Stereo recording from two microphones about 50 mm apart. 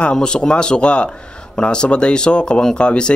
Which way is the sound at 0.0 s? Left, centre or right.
Centre.